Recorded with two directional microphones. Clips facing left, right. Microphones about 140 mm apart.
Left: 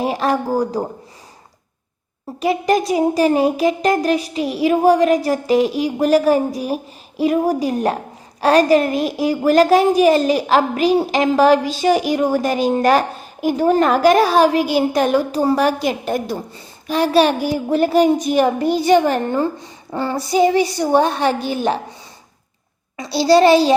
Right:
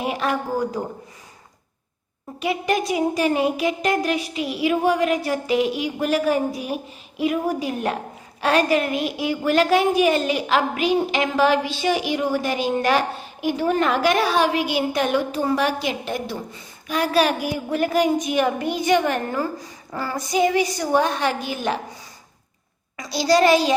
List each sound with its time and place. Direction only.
0.0 s a woman's voice: 35° left (ahead or behind)
2.4 s a woman's voice: 40° left (ahead or behind)
23.0 s a child's voice: 30° left (ahead or behind)